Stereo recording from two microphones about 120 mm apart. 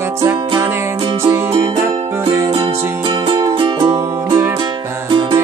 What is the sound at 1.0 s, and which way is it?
Music, 45° right (ahead or behind).